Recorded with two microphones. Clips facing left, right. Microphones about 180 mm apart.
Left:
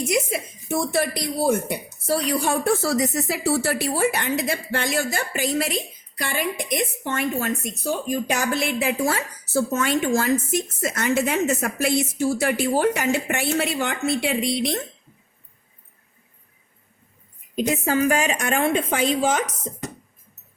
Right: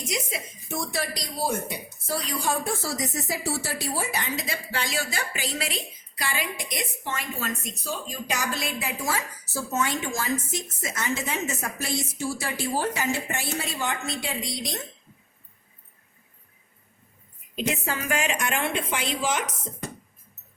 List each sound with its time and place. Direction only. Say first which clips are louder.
0.1 s speech: left 8 dB; 60° left (ahead or behind)
17.5 s a woman's voice: left 7 dB; 40° left (ahead or behind)